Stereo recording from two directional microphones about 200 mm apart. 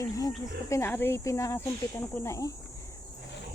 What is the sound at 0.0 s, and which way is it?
Speech, 15° left (ahead or behind).